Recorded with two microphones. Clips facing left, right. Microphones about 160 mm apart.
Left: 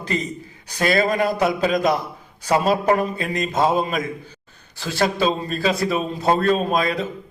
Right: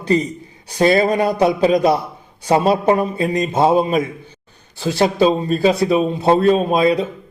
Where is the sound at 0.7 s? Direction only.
30° right (ahead or behind).